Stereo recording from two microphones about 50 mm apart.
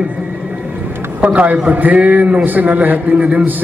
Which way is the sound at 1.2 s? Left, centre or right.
Right.